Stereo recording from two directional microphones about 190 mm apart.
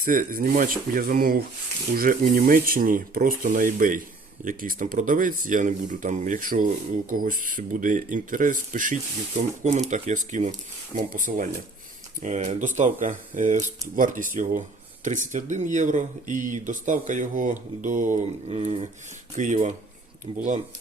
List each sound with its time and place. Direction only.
0.0 s speech: 45° right (ahead or behind)
18.4 s speech: 30° right (ahead or behind)